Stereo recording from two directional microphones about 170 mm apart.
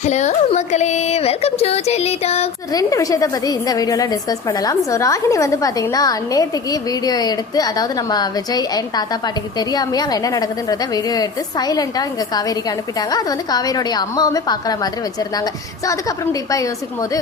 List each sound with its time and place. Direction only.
0.0 s speech: 45° left (ahead or behind)
2.7 s a woman's voice: 20° left (ahead or behind)